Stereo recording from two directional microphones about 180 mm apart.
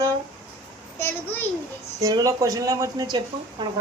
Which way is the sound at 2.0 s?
20° right (ahead or behind).